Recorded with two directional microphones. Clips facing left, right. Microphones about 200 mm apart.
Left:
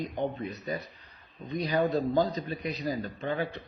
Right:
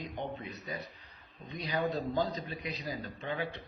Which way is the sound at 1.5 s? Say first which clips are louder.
Left 6 dB; 40° left (ahead or behind).